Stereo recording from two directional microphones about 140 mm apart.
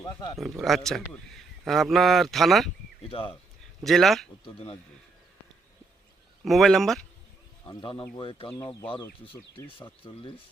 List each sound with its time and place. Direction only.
0.3 s speech: centre (ahead or behind)
3.1 s speech: 40° left (ahead or behind)
3.8 s speech: centre (ahead or behind)
4.4 s speech: 40° left (ahead or behind)
6.4 s speech: centre (ahead or behind)
8.1 s speech: 40° left (ahead or behind)
10.0 s speech: 35° left (ahead or behind)